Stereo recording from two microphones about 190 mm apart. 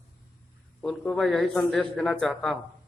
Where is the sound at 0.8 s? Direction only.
5° left (ahead or behind).